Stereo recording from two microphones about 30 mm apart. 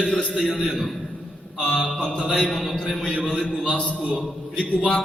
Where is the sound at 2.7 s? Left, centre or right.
Left.